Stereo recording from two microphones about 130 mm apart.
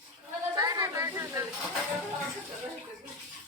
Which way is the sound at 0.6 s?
30° right (ahead or behind).